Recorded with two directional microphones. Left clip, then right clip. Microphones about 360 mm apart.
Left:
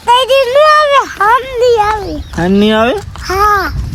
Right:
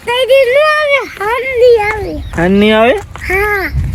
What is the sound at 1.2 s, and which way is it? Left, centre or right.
Speech, centre.